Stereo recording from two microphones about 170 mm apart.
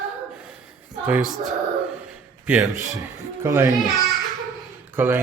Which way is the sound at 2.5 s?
Centre (ahead or behind).